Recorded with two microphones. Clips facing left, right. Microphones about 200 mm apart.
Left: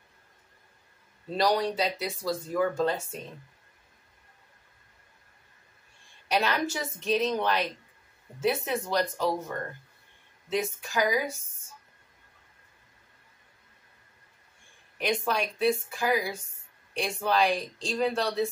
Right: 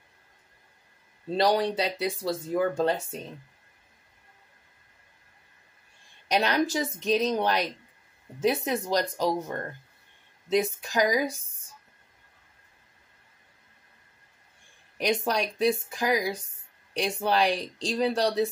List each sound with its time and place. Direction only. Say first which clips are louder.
1.3 s speech: right 2 dB; 30° right (ahead or behind)
6.4 s speech: right 4 dB; 40° right (ahead or behind)
10.5 s speech: right 4 dB; 40° right (ahead or behind)
15.0 s speech: right 2 dB; 40° right (ahead or behind)